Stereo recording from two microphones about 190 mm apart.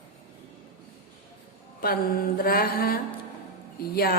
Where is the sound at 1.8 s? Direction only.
50° left (ahead or behind).